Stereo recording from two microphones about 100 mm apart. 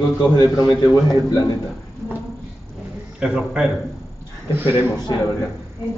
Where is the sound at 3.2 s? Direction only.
10° right (ahead or behind).